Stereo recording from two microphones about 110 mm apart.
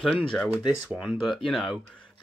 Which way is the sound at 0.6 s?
5° right (ahead or behind).